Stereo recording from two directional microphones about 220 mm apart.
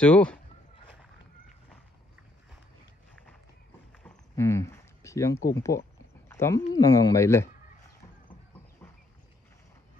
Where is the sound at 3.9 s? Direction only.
10° left (ahead or behind).